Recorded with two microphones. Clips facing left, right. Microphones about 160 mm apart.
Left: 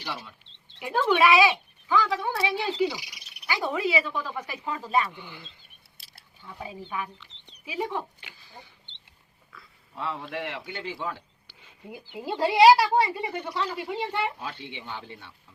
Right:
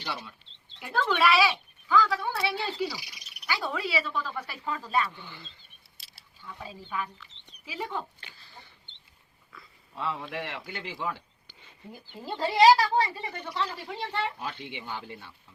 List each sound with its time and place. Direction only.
0.8 s speech: 10° left (ahead or behind)
6.6 s speech: 15° left (ahead or behind)
9.5 s a man's voice: centre (ahead or behind)
11.9 s speech: 10° left (ahead or behind)
14.8 s speech: 5° right (ahead or behind)